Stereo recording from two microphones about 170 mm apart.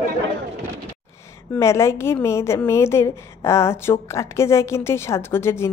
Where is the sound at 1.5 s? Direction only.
15° left (ahead or behind).